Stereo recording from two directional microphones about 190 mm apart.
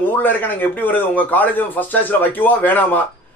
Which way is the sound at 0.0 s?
10° left (ahead or behind).